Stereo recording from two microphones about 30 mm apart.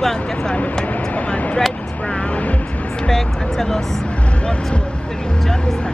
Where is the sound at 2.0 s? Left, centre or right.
Left.